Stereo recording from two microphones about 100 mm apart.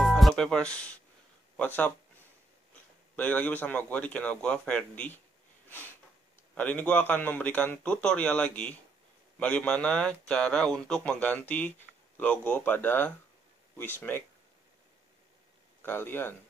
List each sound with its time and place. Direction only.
0.0 s music: centre (ahead or behind)
1.6 s speech: 15° left (ahead or behind)
3.2 s speech: 15° left (ahead or behind)
5.7 s sniff: 20° left (ahead or behind)
6.5 s speech: 15° left (ahead or behind)
15.8 s speech: 20° left (ahead or behind)